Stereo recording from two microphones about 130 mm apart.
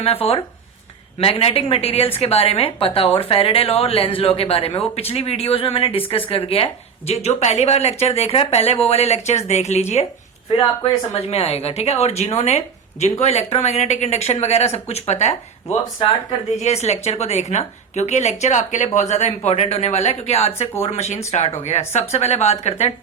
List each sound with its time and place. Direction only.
0.0 s speech: 50° left (ahead or behind)
11.1 s speech: 55° left (ahead or behind)